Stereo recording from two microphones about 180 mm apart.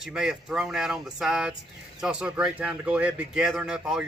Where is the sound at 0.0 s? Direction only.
5° right (ahead or behind).